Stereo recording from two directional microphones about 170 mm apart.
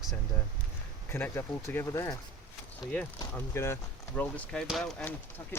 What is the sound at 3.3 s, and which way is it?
Speech, 15° left (ahead or behind).